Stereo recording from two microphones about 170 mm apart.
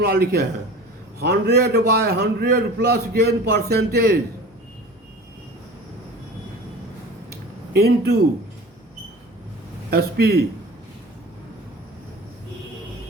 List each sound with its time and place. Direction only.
0.0 s a man's voice: 65° right (ahead or behind)
7.7 s a man's voice: 70° right (ahead or behind)
9.9 s a man's voice: 70° right (ahead or behind)